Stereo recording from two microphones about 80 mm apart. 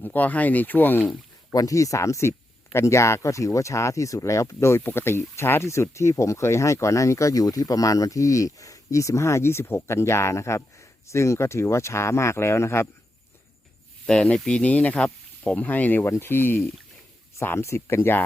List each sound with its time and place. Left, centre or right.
0.0 s speech: left
1.5 s speech: left
14.1 s speech: centre; by 18.2 s left